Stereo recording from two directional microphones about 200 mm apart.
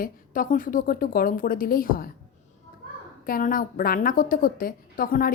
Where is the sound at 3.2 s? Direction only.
45° left (ahead or behind).